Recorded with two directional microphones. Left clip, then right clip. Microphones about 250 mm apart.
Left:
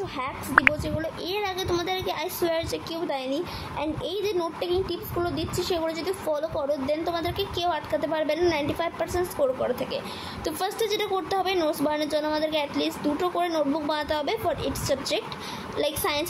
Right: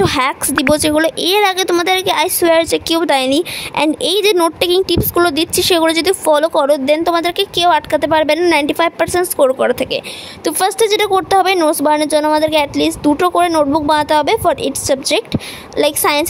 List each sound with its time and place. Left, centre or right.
0.0 s a woman's voice: right